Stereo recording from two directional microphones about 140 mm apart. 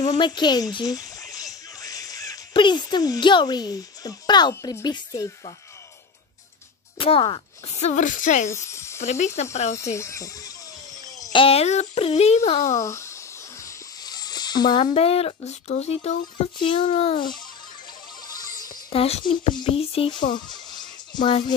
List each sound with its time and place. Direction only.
0.1 s speech: 30° left (ahead or behind)
7.0 s speech: 40° left (ahead or behind)
7.7 s a woman's voice: 55° left (ahead or behind)
8.6 s a sound: 20° left (ahead or behind)
9.0 s a woman's voice: 55° left (ahead or behind)
9.9 s speech: 20° left (ahead or behind)
11.3 s speech: 45° left (ahead or behind)
12.7 s a sound: 20° left (ahead or behind)
15.0 s speech: 45° left (ahead or behind)
18.9 s speech: 45° left (ahead or behind)
20.3 s music: 30° left (ahead or behind)